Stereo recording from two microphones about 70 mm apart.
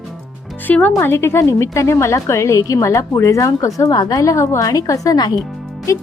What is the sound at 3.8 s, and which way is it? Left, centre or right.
A woman's voice, left.